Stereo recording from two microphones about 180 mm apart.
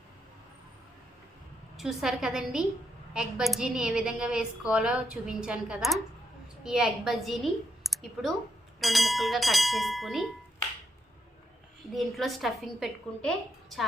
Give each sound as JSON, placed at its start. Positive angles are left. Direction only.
{"t": 1.7, "sound": "a woman's voice", "side_deg": 0}
{"t": 11.9, "sound": "a woman's voice", "side_deg": 0}